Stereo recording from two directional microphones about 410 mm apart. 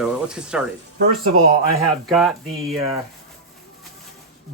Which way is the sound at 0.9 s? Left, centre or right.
Right.